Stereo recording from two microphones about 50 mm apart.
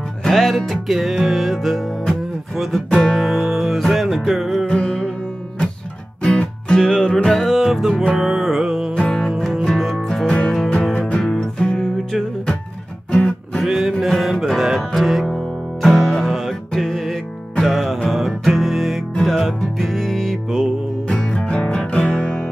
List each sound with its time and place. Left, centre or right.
0.2 s music: centre
4.6 s music: centre
6.7 s music: centre
7.3 s music: centre
8.9 s music: centre
13.7 s music: centre